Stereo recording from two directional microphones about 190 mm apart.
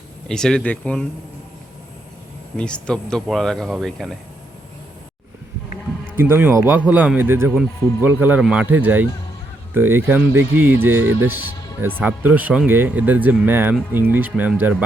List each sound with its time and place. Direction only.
0.3 s speech: 5° left (ahead or behind)
2.6 s speech: 5° left (ahead or behind)
6.1 s speech: 10° right (ahead or behind)